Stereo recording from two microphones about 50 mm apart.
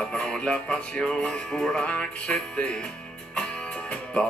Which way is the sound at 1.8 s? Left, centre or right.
Left.